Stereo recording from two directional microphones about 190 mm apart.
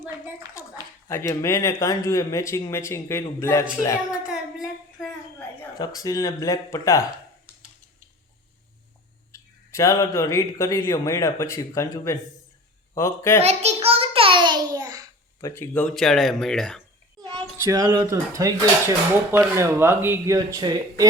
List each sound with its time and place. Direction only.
0.4 s clapping: 20° right (ahead or behind)
1.0 s speech: 15° left (ahead or behind)
4.3 s a sound: 5° right (ahead or behind)
5.4 s speech: 20° left (ahead or behind)
9.3 s speech: 15° left (ahead or behind)
13.4 s a sound: 35° right (ahead or behind)
14.8 s a child's voice: 20° right (ahead or behind)
15.4 s speech: 15° left (ahead or behind)
17.6 s speech: 20° right (ahead or behind)